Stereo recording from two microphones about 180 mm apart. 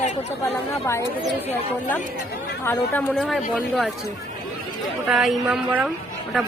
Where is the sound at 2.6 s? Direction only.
10° left (ahead or behind).